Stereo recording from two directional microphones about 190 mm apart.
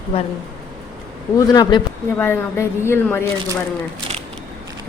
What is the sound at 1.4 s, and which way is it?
Speech, 20° left (ahead or behind).